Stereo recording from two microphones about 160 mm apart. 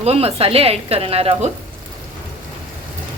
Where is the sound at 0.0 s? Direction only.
40° right (ahead or behind).